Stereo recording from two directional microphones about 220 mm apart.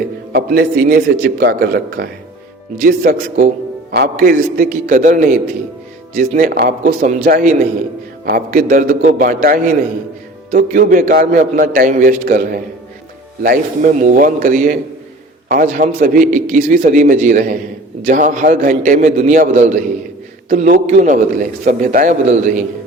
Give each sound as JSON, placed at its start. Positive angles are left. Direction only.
{"t": 0.3, "sound": "a man's voice", "side_deg": -45}